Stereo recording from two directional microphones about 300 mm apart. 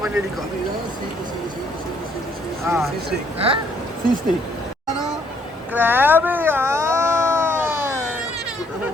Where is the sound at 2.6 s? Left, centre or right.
Centre.